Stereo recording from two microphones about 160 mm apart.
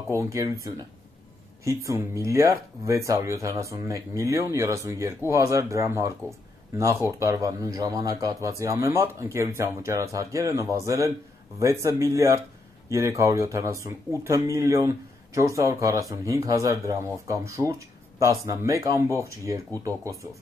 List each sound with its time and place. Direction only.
0.1 s speech: 20° right (ahead or behind)